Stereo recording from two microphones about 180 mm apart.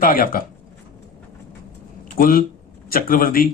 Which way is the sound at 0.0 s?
50° left (ahead or behind).